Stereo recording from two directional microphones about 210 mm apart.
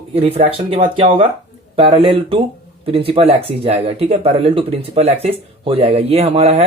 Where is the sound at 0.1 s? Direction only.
30° right (ahead or behind).